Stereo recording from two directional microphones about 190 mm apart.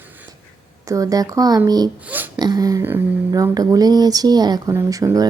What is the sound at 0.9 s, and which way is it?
Speech, 20° right (ahead or behind).